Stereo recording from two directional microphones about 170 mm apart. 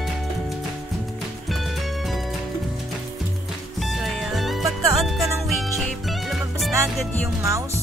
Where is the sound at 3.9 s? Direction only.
Centre (ahead or behind).